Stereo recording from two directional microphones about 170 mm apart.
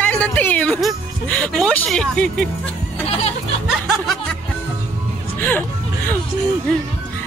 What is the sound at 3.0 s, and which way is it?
Music, 35° left (ahead or behind).